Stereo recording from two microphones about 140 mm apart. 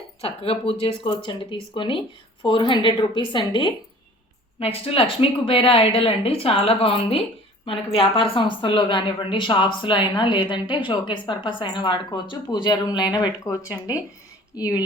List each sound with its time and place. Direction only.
0.2 s a woman's voice: 40° left (ahead or behind); by 14.8 s 25° left (ahead or behind)